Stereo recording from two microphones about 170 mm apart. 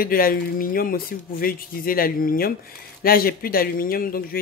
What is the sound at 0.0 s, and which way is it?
Speech, 60° left (ahead or behind).